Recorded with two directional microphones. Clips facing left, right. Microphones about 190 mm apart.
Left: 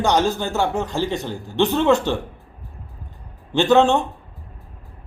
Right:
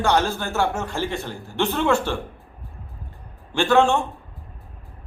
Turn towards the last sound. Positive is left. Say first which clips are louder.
# left 3 dB
turn(degrees=20)  # may be behind; listen again after turning